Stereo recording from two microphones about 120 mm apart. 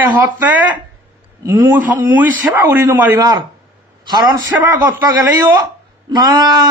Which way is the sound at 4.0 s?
35° right (ahead or behind).